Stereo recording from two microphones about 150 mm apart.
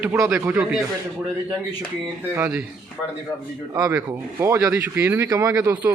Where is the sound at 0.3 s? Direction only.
5° right (ahead or behind).